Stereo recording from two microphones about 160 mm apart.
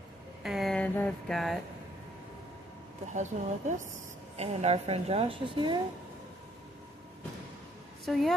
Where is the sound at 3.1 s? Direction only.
50° right (ahead or behind); by 5.8 s 30° right (ahead or behind).